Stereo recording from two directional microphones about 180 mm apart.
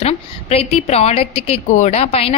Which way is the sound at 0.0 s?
35° left (ahead or behind).